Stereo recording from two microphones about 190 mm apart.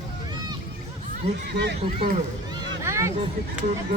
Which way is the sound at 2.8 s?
15° right (ahead or behind).